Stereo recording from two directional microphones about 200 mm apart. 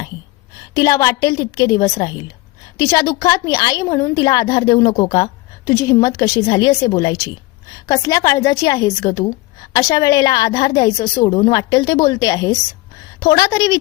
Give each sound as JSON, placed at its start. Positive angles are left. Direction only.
{"t": 0.7, "sound": "a woman's voice", "side_deg": 15}